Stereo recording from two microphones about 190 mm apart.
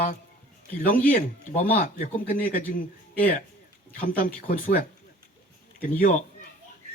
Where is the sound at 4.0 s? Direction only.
45° left (ahead or behind).